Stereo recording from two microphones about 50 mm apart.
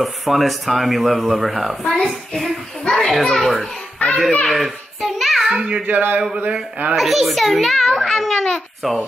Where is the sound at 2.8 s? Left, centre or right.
Centre.